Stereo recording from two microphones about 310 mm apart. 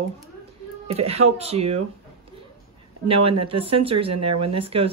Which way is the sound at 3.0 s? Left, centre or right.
Centre.